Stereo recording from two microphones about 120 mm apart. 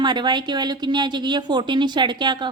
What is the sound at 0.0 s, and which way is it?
Speech, 40° right (ahead or behind).